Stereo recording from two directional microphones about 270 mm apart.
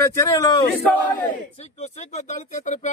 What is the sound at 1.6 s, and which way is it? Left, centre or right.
Speech, left.